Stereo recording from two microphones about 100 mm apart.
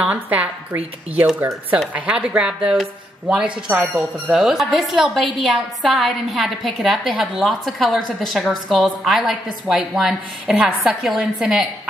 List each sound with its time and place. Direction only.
0.0 s a woman's voice: 10° right (ahead or behind)